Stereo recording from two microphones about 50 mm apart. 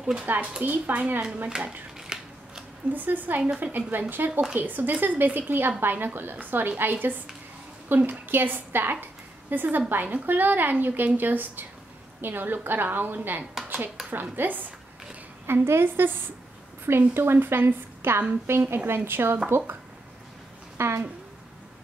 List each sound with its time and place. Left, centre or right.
0.2 s a woman's voice: right
1.5 s speech: centre
2.0 s scissors: centre
2.9 s a woman's voice: right
4.2 s a woman's voice: right
15.4 s a woman's voice: right
20.7 s a woman's voice: right